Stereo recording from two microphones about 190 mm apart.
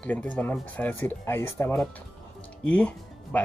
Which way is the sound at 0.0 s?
5° left (ahead or behind).